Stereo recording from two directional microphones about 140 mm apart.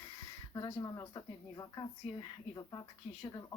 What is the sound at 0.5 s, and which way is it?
Speech, 25° left (ahead or behind).